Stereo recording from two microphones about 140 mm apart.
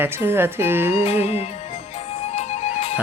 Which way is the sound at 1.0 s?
50° left (ahead or behind).